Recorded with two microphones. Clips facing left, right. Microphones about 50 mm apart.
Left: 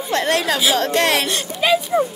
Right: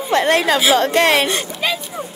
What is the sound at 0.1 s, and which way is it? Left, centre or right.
A woman's voice, right.